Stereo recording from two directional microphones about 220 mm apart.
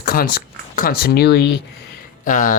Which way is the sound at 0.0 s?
40° left (ahead or behind).